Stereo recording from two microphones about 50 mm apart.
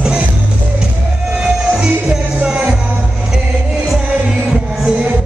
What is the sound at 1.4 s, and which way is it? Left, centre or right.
Music, centre.